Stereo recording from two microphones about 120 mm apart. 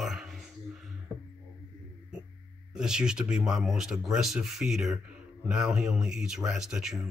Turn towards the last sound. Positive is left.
turn(degrees=-5)  # may be behind; listen again after turning